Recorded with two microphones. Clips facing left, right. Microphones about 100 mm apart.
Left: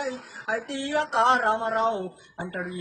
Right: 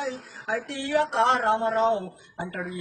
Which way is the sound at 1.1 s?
20° left (ahead or behind).